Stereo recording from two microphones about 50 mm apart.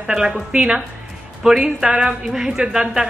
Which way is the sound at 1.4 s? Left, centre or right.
Centre.